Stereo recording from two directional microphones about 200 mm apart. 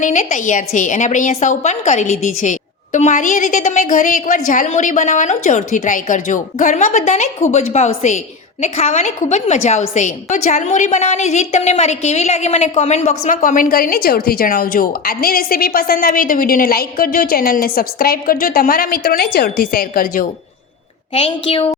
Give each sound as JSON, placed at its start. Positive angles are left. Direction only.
{"t": 0.0, "sound": "a woman's voice", "side_deg": 40}
{"t": 21.1, "sound": "a woman's voice", "side_deg": 30}